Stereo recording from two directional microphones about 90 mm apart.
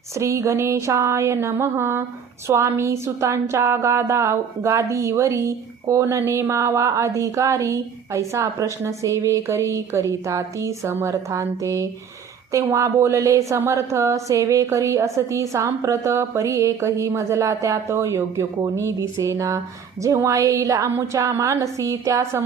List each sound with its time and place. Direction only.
0.1 s a woman's voice: 35° right (ahead or behind)